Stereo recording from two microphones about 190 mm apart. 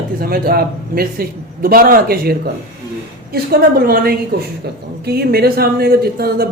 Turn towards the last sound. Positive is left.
turn(degrees=-55)  # may be behind; listen again after turning